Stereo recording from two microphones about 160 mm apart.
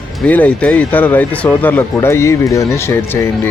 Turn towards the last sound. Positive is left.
turn(degrees=15)  # may be behind; listen again after turning